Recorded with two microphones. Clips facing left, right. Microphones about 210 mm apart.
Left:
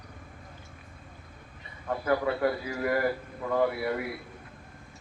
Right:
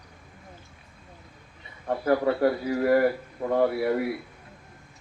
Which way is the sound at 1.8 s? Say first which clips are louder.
Right 4 dB; 35° right (ahead or behind).